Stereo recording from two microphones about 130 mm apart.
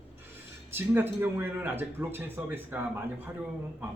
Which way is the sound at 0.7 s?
15° right (ahead or behind).